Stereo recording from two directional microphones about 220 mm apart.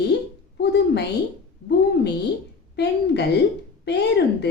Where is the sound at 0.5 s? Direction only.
50° left (ahead or behind).